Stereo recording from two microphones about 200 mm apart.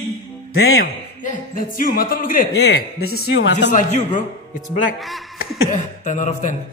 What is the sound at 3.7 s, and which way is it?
Speech, 40° left (ahead or behind).